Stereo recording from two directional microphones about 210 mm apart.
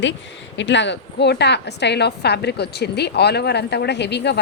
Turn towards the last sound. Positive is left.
turn(degrees=55)  # may be behind; listen again after turning